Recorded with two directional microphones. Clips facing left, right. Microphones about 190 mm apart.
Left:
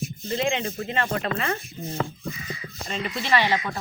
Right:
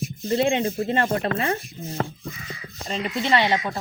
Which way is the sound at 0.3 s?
35° right (ahead or behind).